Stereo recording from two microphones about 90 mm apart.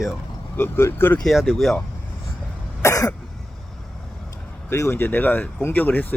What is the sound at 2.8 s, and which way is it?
Cough, 40° left (ahead or behind).